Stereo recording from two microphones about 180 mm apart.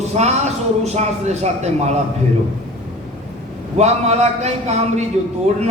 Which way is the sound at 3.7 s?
40° right (ahead or behind).